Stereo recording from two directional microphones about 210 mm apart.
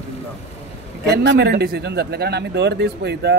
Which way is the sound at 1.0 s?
55° right (ahead or behind).